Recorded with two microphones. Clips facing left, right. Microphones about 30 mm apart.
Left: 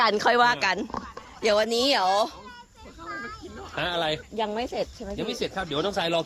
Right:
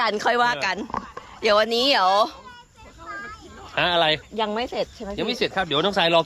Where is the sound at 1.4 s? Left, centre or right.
Right.